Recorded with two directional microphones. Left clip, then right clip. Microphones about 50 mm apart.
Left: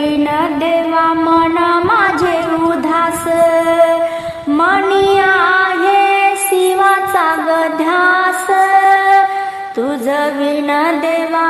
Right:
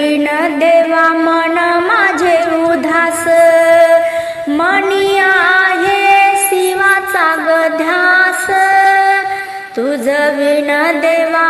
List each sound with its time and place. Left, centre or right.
0.6 s music: centre
4.6 s a sound: centre
5.8 s music: left
7.9 s music: left
11.0 s music: left